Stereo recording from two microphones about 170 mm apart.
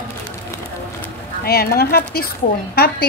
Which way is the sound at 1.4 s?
65° left (ahead or behind).